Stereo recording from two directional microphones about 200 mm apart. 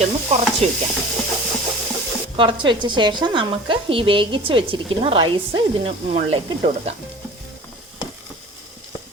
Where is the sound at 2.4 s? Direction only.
25° right (ahead or behind).